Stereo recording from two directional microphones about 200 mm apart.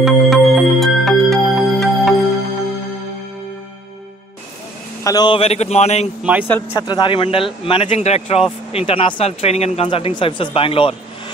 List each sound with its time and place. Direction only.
0.0 s music: centre (ahead or behind)
5.0 s a man's voice: 20° left (ahead or behind)
6.5 s speech: 20° left (ahead or behind)